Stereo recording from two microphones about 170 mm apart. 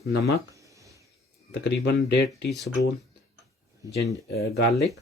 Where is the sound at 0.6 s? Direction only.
20° right (ahead or behind).